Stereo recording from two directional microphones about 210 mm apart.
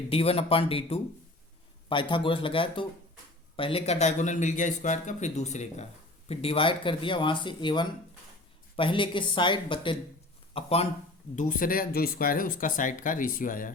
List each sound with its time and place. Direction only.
0.1 s speech: 25° left (ahead or behind)
11.3 s speech: 40° left (ahead or behind)